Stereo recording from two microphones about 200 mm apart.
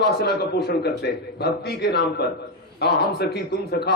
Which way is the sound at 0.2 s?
55° left (ahead or behind).